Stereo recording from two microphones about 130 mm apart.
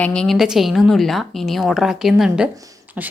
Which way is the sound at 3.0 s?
10° right (ahead or behind).